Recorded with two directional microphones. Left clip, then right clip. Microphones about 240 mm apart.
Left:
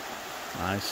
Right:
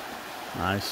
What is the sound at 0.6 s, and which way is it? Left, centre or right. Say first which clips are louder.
Speech: right 3 dB; centre.